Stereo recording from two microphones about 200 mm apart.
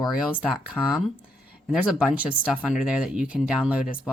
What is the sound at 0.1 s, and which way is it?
Speech, centre (ahead or behind).